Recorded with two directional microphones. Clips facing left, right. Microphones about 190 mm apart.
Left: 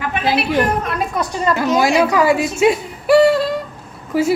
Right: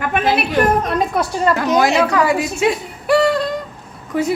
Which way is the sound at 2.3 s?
25° left (ahead or behind).